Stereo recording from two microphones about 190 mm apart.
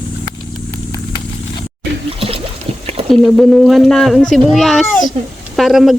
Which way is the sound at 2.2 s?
30° right (ahead or behind).